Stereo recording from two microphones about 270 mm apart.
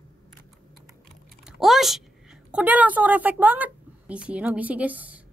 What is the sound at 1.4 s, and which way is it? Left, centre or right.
A woman's voice, centre.